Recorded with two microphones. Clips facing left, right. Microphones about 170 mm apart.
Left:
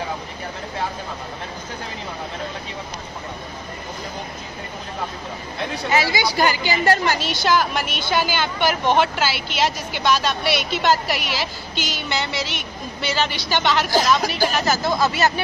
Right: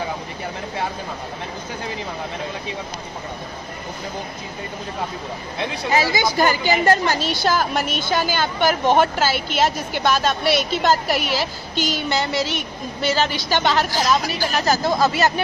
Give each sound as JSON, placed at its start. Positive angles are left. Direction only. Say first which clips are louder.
{"t": 5.9, "sound": "a woman's voice", "louder": "right 1 dB", "side_deg": -40}